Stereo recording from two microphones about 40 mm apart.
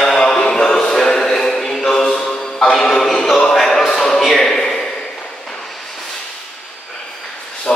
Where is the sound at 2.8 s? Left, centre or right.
Centre.